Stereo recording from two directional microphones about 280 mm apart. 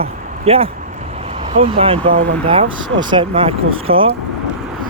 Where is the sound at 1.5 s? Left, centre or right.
Centre.